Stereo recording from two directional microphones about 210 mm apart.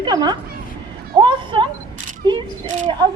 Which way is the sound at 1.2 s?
20° right (ahead or behind).